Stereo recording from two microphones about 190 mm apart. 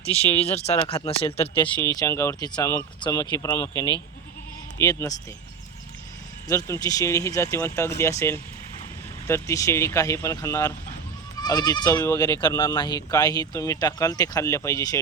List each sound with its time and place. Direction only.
0.5 s speech: 35° left (ahead or behind)
2.0 s speech: 15° left (ahead or behind)
6.5 s speech: 20° left (ahead or behind)